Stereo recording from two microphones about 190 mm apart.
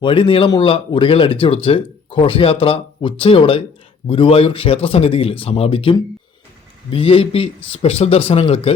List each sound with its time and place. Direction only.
0.0 s speech: 25° left (ahead or behind)